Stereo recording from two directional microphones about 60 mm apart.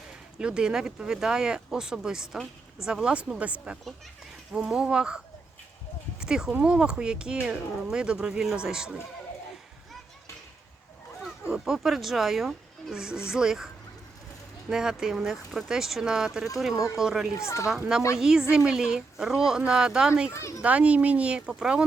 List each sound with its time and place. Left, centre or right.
0.1 s speech: centre
4.5 s speech: centre
11.5 s speech: centre
14.7 s speech: centre
16.7 s speech: left
17.0 s speech: centre
17.3 s speech: left
17.7 s speech: centre
20.3 s speech: left
20.6 s speech: centre